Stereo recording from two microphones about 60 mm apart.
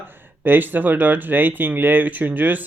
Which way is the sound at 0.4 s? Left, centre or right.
Right.